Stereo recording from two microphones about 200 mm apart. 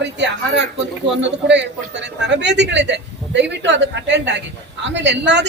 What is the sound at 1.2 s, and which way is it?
Speech, 60° right (ahead or behind).